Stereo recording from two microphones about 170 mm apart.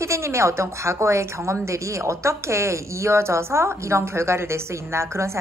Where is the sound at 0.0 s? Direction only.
15° right (ahead or behind).